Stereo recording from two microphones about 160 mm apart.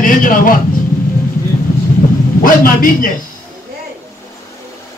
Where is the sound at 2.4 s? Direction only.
60° left (ahead or behind).